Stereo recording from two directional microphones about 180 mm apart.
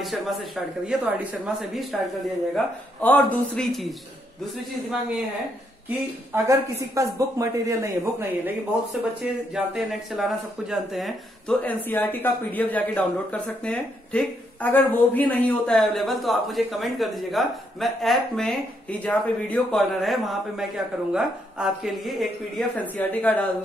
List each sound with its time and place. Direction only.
0.0 s speech: centre (ahead or behind)
2.5 s speech: 10° left (ahead or behind)
5.9 s speech: 15° right (ahead or behind)
9.2 s a woman's voice: 5° right (ahead or behind)